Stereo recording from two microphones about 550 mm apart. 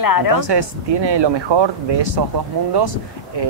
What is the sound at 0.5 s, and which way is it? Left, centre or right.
Speech, right.